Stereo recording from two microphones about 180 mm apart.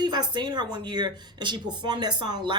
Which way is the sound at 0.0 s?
25° right (ahead or behind).